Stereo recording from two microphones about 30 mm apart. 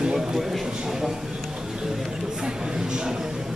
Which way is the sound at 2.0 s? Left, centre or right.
Right.